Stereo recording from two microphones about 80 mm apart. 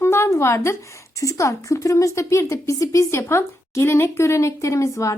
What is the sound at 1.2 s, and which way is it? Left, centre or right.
A woman's voice, left.